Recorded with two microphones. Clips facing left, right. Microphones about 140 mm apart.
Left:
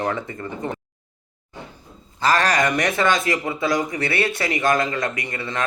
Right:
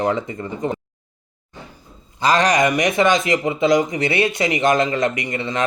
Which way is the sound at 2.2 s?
15° right (ahead or behind).